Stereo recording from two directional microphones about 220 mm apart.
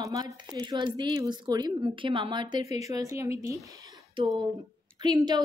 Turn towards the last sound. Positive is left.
turn(degrees=-20)  # may be behind; listen again after turning